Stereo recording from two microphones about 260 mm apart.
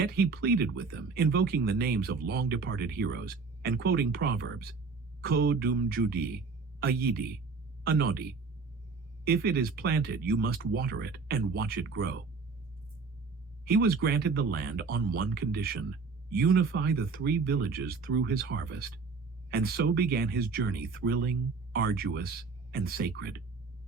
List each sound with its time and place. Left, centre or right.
0.0 s speech: right
13.7 s speech: right